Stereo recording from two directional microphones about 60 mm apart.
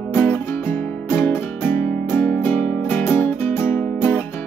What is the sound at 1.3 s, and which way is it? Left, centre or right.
Music, left.